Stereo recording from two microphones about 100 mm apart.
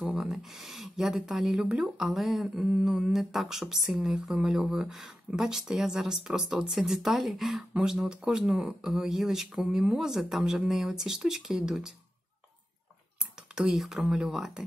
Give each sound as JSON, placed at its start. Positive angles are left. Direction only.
{"t": 0.1, "sound": "speech", "side_deg": -5}
{"t": 13.6, "sound": "speech", "side_deg": -5}